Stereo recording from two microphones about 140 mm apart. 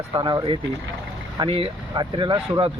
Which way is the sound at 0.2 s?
30° right (ahead or behind).